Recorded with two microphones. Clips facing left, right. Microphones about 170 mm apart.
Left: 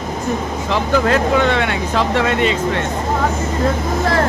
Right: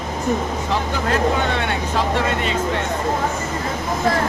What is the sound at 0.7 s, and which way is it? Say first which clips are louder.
Speech: left 7 dB; 90° left.